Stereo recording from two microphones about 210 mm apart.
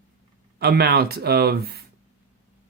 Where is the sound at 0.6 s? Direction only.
50° right (ahead or behind).